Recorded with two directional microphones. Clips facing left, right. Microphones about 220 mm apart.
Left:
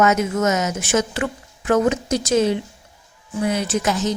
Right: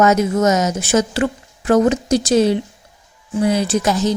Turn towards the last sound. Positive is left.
turn(degrees=-35)  # may be behind; listen again after turning